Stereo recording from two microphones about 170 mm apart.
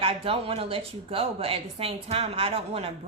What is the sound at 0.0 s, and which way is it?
A woman's voice, 35° right (ahead or behind).